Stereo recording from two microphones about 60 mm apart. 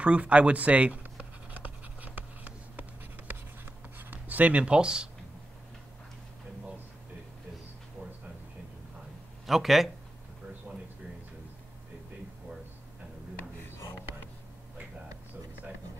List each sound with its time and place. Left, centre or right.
0.0 s speech: right
1.5 s writing: right
9.5 s speech: centre